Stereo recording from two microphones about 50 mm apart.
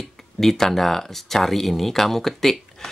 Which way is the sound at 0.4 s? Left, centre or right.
Centre.